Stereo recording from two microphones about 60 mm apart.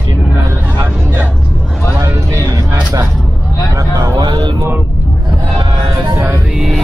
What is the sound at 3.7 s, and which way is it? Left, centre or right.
Vehicle, right.